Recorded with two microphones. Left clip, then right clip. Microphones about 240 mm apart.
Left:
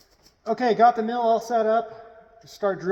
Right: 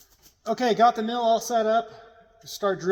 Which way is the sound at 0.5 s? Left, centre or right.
Centre.